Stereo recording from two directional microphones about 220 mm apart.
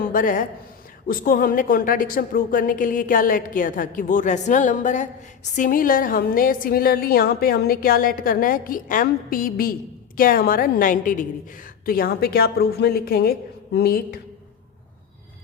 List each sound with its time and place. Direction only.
0.0 s a woman's voice: 40° left (ahead or behind)